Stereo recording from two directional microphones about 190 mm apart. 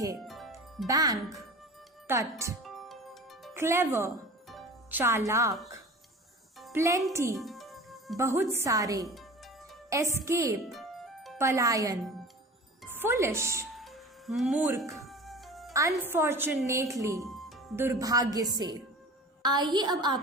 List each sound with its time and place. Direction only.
0.3 s music: centre (ahead or behind)
0.9 s a woman's voice: 20° right (ahead or behind)
2.6 s music: centre (ahead or behind)
3.5 s speech: 15° right (ahead or behind)
4.4 s music: 5° right (ahead or behind)
6.7 s speech: 15° right (ahead or behind)
7.3 s music: centre (ahead or behind)
8.1 s speech: 15° right (ahead or behind)
10.7 s music: centre (ahead or behind)
11.3 s speech: 15° right (ahead or behind)
13.7 s music: centre (ahead or behind)
15.7 s speech: 15° right (ahead or behind)
17.2 s music: centre (ahead or behind)
17.7 s a woman's voice: 15° right (ahead or behind)